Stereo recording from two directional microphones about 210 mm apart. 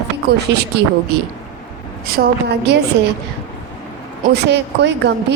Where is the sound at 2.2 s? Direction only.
45° right (ahead or behind).